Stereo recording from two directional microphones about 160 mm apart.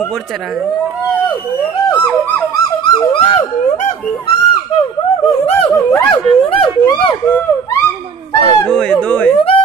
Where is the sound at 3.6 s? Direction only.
45° left (ahead or behind).